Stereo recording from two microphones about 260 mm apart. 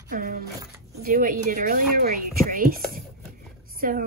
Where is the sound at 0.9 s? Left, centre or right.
Right.